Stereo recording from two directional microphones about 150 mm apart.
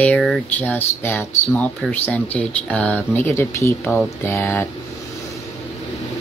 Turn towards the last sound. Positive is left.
turn(degrees=15)  # may be behind; listen again after turning